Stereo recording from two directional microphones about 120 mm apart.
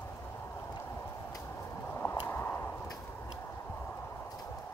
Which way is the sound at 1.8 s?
15° left (ahead or behind).